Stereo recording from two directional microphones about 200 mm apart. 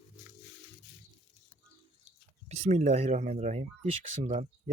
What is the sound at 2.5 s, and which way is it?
Speech, 35° right (ahead or behind).